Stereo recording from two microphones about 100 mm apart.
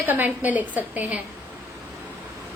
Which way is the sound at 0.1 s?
15° right (ahead or behind).